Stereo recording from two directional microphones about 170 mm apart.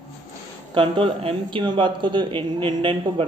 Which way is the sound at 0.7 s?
30° right (ahead or behind).